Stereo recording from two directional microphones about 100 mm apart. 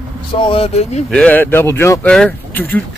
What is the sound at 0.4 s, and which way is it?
Speech, 70° left (ahead or behind).